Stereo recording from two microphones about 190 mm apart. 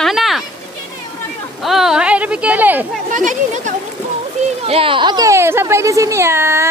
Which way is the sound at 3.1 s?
40° right (ahead or behind).